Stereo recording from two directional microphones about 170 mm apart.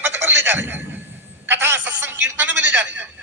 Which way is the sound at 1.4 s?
15° right (ahead or behind).